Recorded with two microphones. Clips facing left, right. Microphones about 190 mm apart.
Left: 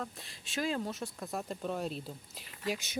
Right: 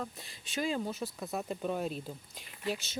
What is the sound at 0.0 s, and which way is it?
Speech, centre (ahead or behind).